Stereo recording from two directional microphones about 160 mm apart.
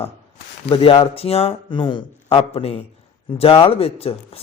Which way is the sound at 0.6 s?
35° left (ahead or behind).